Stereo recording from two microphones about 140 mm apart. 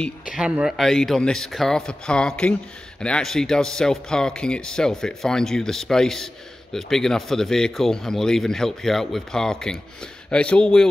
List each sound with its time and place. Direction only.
0.3 s speech: 5° right (ahead or behind)